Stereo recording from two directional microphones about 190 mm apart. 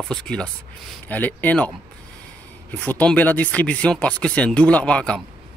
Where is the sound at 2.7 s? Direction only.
10° left (ahead or behind).